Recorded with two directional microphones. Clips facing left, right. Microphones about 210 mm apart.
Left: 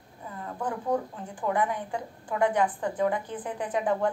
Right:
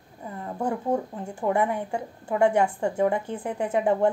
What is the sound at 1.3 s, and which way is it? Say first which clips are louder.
A woman's voice: right 3 dB; 25° right (ahead or behind).